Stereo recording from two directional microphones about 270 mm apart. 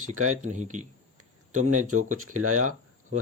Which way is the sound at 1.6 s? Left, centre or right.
Right.